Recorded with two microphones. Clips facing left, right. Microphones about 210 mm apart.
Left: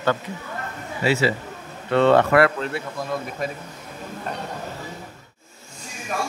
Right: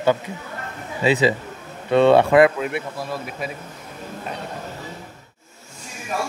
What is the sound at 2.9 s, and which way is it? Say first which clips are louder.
Speech: left 1 dB; 5° right (ahead or behind).